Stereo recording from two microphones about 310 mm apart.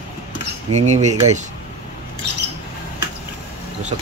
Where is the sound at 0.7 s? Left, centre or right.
Right.